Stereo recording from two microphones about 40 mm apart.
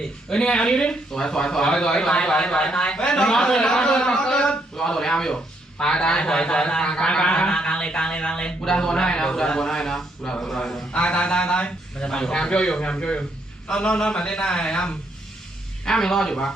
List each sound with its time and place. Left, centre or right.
0.3 s a man's voice: left
10.9 s a man's voice: left